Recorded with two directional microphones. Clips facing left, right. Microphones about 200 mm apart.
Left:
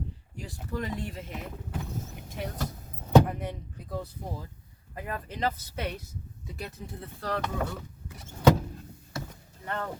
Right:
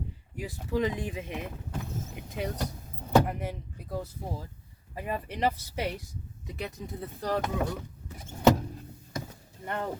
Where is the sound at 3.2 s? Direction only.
5° right (ahead or behind).